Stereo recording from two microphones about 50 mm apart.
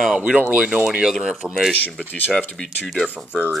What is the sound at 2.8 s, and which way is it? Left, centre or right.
Speech, centre.